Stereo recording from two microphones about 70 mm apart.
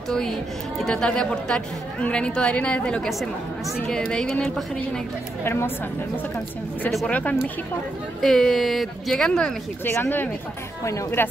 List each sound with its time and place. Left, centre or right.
0.8 s a woman's voice: centre
3.1 s speech: centre
3.8 s a woman's voice: centre
5.4 s speech: left
7.1 s speech: left
8.2 s speech: centre
9.9 s speech: left
10.8 s speech: left